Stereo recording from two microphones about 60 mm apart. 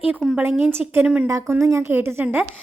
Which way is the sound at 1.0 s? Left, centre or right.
Centre.